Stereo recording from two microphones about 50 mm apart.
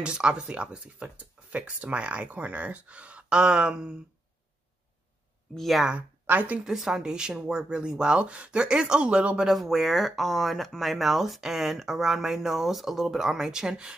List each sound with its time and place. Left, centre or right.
0.0 s speech: centre
5.6 s speech: centre
5.9 s a woman's voice: right
6.6 s speech: centre
9.5 s speech: centre